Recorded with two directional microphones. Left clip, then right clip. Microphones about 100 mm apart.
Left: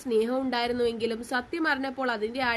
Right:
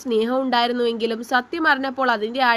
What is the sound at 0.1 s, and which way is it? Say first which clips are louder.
A woman's voice: right 6 dB; 35° right (ahead or behind).